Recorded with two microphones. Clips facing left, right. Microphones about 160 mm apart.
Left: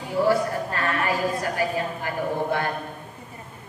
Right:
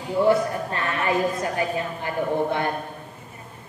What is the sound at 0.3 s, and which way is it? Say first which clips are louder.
A woman's voice: right 2 dB; 25° right (ahead or behind).